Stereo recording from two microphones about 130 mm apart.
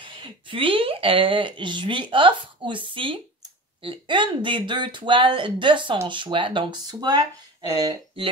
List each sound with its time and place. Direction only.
0.0 s a woman's voice: 40° right (ahead or behind)